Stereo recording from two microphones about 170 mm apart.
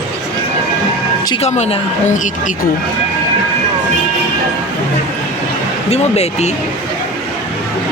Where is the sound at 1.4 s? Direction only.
40° left (ahead or behind).